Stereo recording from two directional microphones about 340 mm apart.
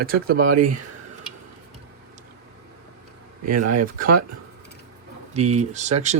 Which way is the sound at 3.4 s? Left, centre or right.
Right.